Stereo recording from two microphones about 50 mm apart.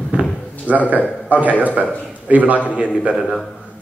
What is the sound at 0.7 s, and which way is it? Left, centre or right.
Speech, right.